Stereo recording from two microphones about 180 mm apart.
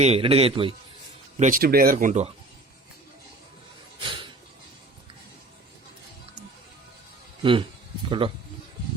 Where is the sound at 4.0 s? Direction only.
25° right (ahead or behind).